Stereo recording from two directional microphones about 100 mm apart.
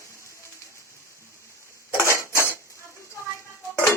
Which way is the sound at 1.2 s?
30° left (ahead or behind).